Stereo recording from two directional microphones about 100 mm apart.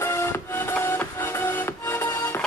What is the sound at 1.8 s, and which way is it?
Music, 25° left (ahead or behind).